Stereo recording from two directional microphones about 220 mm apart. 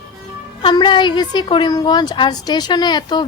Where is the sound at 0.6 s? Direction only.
20° left (ahead or behind).